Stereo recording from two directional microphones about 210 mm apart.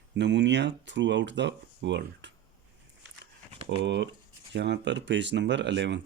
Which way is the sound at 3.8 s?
55° right (ahead or behind).